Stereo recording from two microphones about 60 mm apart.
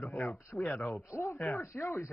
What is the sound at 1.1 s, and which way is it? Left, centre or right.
Speech, left.